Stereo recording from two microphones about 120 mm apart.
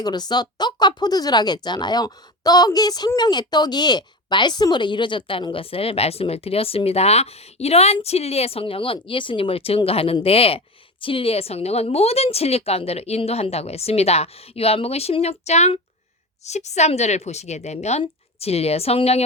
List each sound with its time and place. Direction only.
0.0 s a woman's voice: 35° left (ahead or behind); by 19.2 s 60° left (ahead or behind)